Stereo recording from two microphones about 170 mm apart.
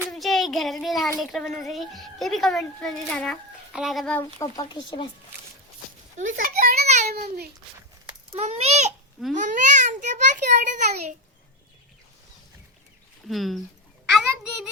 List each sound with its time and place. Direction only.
0.1 s a child's voice: centre (ahead or behind)
4.2 s speech: 20° left (ahead or behind)
6.1 s a child's voice: 50° right (ahead or behind)
6.8 s a child's voice: 45° right (ahead or behind)
7.1 s a child's voice: 65° right (ahead or behind)
8.3 s a child's voice: 40° right (ahead or behind)
13.2 s a child's voice: centre (ahead or behind)